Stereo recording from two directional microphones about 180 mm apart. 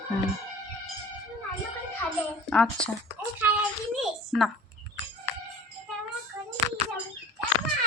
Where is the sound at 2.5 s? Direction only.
5° left (ahead or behind).